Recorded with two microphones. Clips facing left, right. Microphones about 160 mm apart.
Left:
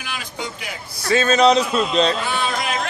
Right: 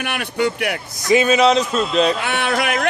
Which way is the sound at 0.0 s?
65° right (ahead or behind).